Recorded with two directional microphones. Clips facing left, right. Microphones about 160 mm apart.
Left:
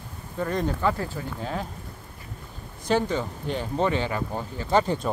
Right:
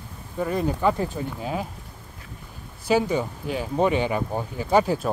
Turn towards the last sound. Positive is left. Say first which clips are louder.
# right 2 dB
turn(degrees=-5)  # may be behind; listen again after turning